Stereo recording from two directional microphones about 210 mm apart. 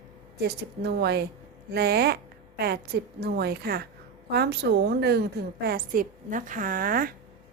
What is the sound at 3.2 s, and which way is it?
A woman's voice, 50° right (ahead or behind).